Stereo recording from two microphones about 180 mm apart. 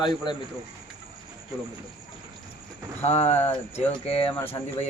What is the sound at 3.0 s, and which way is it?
Speech, 40° left (ahead or behind).